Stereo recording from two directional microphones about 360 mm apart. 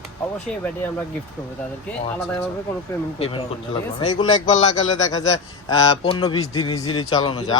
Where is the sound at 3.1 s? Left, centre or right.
Centre.